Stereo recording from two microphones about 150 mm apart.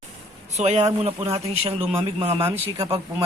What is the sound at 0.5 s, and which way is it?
A man's voice, 45° right (ahead or behind).